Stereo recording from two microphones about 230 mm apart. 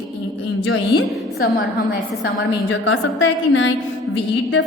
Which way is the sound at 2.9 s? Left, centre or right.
Left.